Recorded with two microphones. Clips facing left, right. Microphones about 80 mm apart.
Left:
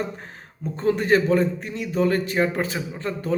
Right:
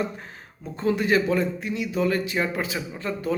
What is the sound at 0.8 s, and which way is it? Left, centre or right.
Speech, left.